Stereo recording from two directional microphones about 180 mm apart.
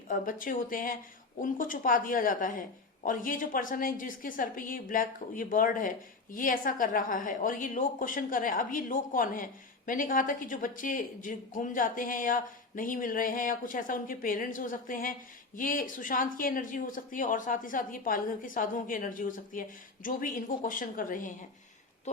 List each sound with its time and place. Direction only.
0.1 s a woman's voice: 50° left (ahead or behind)